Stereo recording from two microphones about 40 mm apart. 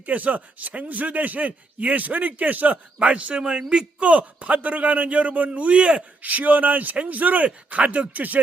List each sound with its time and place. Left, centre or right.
0.0 s a man's voice: right